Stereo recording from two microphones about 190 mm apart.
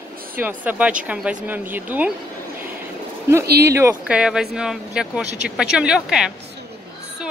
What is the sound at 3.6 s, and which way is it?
Speech, 15° right (ahead or behind).